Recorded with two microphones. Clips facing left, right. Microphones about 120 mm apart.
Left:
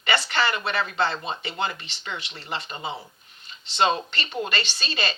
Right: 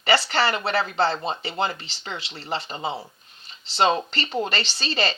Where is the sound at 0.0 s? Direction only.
35° right (ahead or behind).